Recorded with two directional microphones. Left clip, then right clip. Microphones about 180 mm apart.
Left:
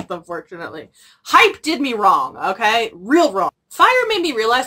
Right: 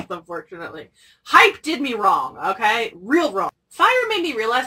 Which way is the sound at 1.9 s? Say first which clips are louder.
Left 4 dB; 30° left (ahead or behind).